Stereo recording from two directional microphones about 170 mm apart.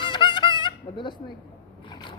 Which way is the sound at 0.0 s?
30° left (ahead or behind).